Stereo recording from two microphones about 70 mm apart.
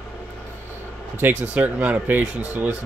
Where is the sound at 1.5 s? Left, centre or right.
Right.